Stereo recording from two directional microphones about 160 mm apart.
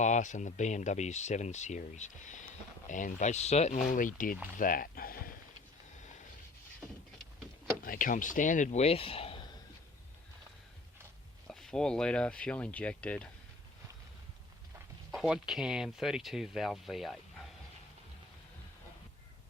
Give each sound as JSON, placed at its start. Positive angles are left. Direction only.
{"t": 0.0, "sound": "speech", "side_deg": 50}
{"t": 7.9, "sound": "speech", "side_deg": 60}
{"t": 11.4, "sound": "speech", "side_deg": 5}
{"t": 15.1, "sound": "speech", "side_deg": -5}